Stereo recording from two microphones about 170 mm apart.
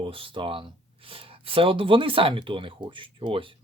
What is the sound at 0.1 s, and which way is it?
Speech, 30° right (ahead or behind).